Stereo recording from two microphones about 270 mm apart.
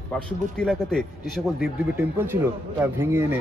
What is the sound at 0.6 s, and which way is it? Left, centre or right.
A man's voice, centre.